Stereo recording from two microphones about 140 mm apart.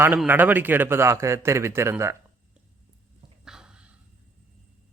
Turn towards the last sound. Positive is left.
turn(degrees=-5)  # may be behind; listen again after turning